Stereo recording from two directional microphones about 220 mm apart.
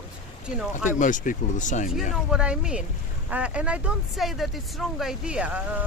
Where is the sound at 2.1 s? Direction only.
5° right (ahead or behind).